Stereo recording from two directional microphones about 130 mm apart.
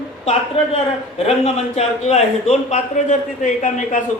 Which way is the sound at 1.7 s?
55° left (ahead or behind).